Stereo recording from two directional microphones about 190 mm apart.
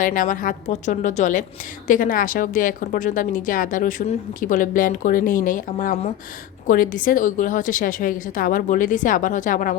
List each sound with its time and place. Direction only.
0.0 s a woman's voice: 45° left (ahead or behind)